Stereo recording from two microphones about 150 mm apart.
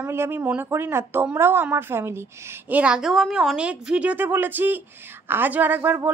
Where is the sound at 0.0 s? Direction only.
15° right (ahead or behind).